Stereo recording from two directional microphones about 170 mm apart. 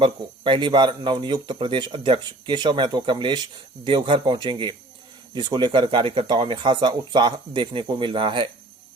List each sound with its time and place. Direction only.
0.0 s speech: 30° right (ahead or behind)